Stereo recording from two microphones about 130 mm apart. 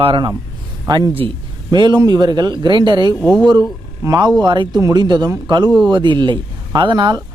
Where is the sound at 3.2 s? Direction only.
5° left (ahead or behind).